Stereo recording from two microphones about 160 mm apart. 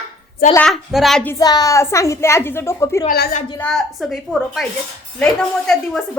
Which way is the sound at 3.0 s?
75° left (ahead or behind).